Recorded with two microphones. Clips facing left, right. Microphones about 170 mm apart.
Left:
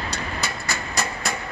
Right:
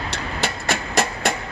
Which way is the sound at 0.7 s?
90° right.